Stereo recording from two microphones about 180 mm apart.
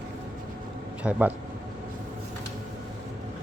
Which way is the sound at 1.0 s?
5° right (ahead or behind).